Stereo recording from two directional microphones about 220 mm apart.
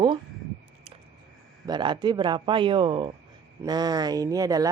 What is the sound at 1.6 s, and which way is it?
Speech, 20° right (ahead or behind).